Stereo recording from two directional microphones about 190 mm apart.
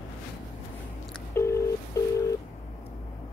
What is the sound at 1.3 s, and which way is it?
Telephone dialing, 15° left (ahead or behind).